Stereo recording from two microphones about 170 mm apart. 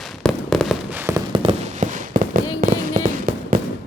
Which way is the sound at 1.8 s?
50° right (ahead or behind).